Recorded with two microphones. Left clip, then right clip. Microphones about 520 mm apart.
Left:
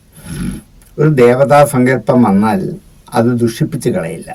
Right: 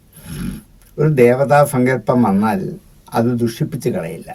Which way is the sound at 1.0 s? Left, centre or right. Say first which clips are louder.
Left 4 dB; right.